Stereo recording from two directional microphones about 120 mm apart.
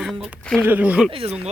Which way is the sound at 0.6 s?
15° right (ahead or behind).